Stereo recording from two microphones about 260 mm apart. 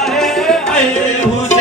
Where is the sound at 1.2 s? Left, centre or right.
Left.